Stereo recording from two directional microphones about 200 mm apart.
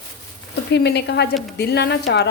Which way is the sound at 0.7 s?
55° left (ahead or behind).